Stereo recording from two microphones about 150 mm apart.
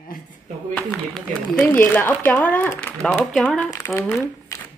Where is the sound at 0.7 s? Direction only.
5° left (ahead or behind).